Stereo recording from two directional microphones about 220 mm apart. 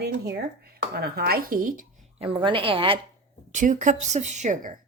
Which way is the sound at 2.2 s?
25° right (ahead or behind).